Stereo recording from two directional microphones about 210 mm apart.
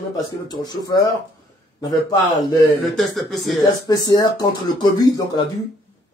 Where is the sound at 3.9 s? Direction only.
20° left (ahead or behind).